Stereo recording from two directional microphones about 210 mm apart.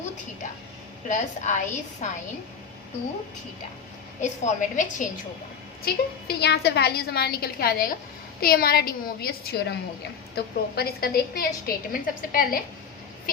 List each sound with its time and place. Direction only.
1.0 s a woman's voice: 35° left (ahead or behind)
4.2 s a woman's voice: 35° left (ahead or behind)
5.8 s a woman's voice: 50° left (ahead or behind)